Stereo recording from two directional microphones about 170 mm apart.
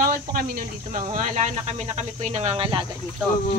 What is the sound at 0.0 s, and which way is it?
Speech, 60° right (ahead or behind).